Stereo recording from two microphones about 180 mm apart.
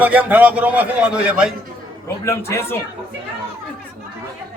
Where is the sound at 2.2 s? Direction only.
15° left (ahead or behind).